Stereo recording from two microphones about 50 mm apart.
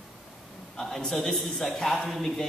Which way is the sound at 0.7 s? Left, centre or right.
Centre.